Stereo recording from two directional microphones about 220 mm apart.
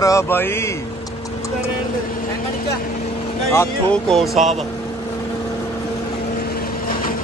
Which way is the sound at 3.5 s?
10° left (ahead or behind).